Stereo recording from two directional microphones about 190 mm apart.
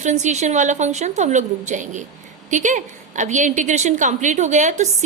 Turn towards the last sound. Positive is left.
turn(degrees=-40)  # may be behind; listen again after turning